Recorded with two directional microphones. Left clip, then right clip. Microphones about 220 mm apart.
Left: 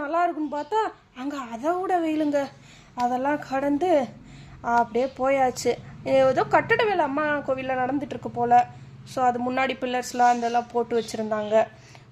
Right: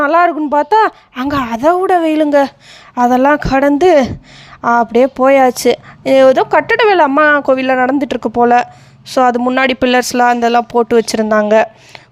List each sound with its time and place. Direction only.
0.0 s speech: 45° right (ahead or behind)